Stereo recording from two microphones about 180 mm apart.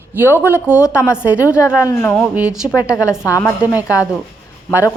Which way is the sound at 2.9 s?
15° left (ahead or behind).